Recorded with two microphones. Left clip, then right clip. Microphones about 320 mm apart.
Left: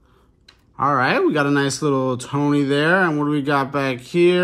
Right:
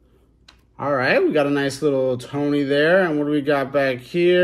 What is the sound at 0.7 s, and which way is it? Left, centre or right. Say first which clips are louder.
Speech: left 1 dB; centre.